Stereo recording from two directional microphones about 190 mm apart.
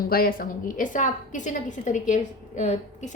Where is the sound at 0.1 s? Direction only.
50° left (ahead or behind).